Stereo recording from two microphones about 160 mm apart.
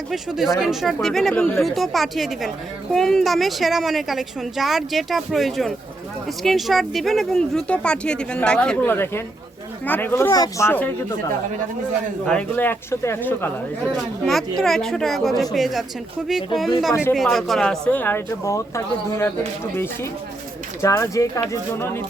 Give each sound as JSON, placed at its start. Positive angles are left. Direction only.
{"t": 0.1, "sound": "speech", "side_deg": 0}
{"t": 12.2, "sound": "speech", "side_deg": 5}
{"t": 14.6, "sound": "speech", "side_deg": 0}
{"t": 16.9, "sound": "speech", "side_deg": 15}
{"t": 17.2, "sound": "speech", "side_deg": 0}